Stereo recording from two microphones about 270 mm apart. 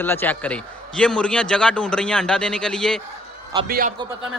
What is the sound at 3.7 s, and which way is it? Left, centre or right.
Speech, right.